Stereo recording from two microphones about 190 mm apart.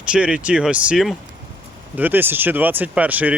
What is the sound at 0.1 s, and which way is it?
Speech, 5° right (ahead or behind).